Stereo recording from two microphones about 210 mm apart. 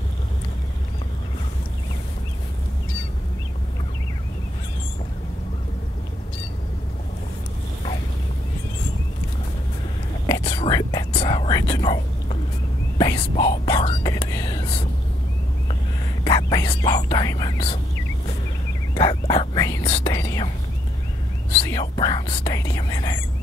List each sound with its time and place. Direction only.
10.2 s whispering: 20° left (ahead or behind)
16.3 s whispering: 20° left (ahead or behind)
18.9 s whispering: 20° left (ahead or behind)
21.6 s whispering: 20° left (ahead or behind)